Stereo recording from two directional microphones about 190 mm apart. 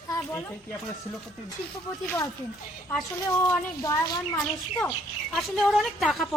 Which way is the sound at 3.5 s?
15° left (ahead or behind).